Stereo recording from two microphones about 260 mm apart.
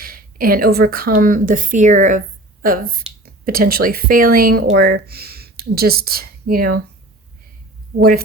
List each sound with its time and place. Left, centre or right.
0.0 s a woman's voice: right
7.9 s speech: right